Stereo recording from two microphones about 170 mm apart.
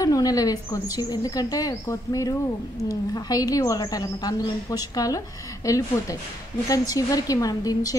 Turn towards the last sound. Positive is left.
turn(degrees=20)  # may be behind; listen again after turning